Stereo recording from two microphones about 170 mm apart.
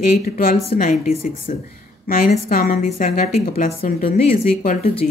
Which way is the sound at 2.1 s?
55° left (ahead or behind).